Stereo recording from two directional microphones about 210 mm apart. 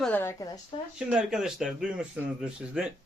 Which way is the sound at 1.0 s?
5° right (ahead or behind).